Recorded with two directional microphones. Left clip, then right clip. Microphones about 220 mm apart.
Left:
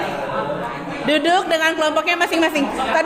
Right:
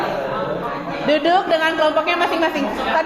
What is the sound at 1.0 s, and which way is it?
A woman's voice, 30° left (ahead or behind).